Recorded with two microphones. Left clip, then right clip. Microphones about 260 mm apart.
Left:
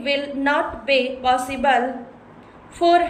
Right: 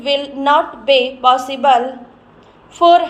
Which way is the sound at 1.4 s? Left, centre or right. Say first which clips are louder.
Right 6 dB; centre.